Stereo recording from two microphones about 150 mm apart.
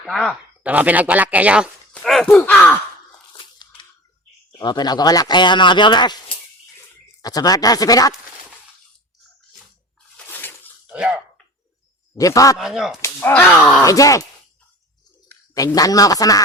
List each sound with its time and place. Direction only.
0.0 s speech: centre (ahead or behind)
0.6 s speech: 10° right (ahead or behind)
1.9 s a sound: 5° left (ahead or behind)
2.4 s speech: 10° left (ahead or behind)
3.3 s crunch: 30° left (ahead or behind)
4.5 s speech: 30° left (ahead or behind)
10.2 s bathtub: 15° left (ahead or behind)
10.8 s a sound: 5° right (ahead or behind)
12.1 s speech: 20° left (ahead or behind)
12.5 s speech: 5° right (ahead or behind)
13.0 s speech: 10° left (ahead or behind)
13.8 s speech: 20° left (ahead or behind)
15.5 s speech: 25° left (ahead or behind)